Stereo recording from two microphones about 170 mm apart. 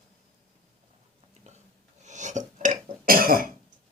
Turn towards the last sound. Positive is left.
turn(degrees=-60)  # may be behind; listen again after turning